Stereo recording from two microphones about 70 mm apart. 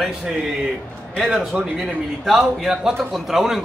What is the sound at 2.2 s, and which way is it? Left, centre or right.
A man's voice, centre.